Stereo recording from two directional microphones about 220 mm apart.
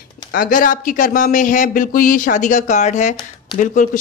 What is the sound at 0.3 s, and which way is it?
Speech, 40° left (ahead or behind).